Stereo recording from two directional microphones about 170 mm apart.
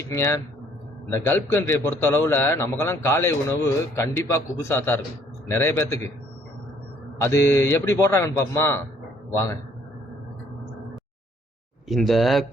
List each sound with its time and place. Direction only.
0.0 s a man's voice: 15° left (ahead or behind)
7.2 s a man's voice: 15° left (ahead or behind)
11.9 s speech: centre (ahead or behind)